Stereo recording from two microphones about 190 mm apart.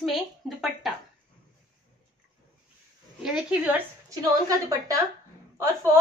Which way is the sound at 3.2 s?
5° right (ahead or behind).